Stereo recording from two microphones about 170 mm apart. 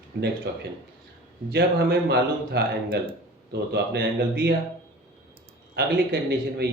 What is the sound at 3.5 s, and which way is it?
Speech, 80° right.